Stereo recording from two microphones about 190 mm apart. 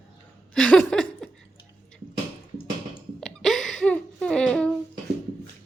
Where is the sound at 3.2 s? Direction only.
Centre (ahead or behind).